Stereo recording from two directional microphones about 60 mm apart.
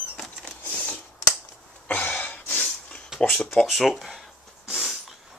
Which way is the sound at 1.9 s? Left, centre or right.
Left.